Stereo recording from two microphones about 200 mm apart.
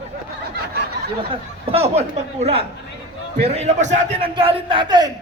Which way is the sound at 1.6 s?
30° right (ahead or behind).